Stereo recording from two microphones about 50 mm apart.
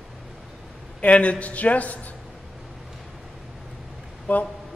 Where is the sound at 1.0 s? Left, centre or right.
Left.